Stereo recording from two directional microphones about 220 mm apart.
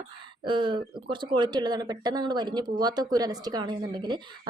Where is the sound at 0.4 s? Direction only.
20° right (ahead or behind).